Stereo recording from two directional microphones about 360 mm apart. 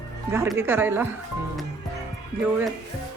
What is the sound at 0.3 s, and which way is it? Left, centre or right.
Speech, centre.